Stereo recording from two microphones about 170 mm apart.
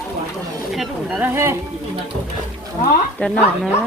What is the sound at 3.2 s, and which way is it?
Speech, 5° left (ahead or behind).